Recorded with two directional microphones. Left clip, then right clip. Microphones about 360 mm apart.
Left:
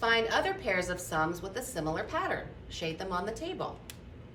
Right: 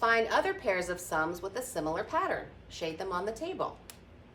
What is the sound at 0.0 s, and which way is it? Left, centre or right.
A woman's voice, centre.